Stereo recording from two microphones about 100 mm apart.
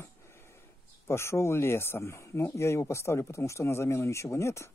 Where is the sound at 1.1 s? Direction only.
25° left (ahead or behind).